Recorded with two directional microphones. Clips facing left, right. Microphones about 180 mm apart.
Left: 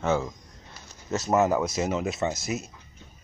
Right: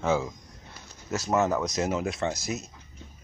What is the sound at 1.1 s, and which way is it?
Speech, centre (ahead or behind).